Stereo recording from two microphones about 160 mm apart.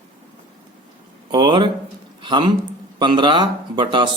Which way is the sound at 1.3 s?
30° right (ahead or behind).